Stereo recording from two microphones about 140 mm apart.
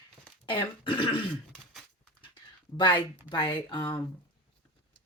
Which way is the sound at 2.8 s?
35° left (ahead or behind).